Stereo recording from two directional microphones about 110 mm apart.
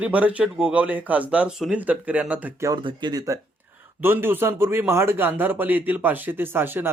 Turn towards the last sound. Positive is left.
turn(degrees=-20)  # may be behind; listen again after turning